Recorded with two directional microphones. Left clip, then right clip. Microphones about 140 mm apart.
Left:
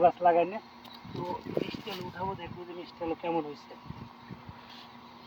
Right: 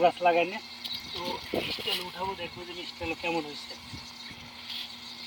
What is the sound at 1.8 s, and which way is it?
Speech, 5° left (ahead or behind).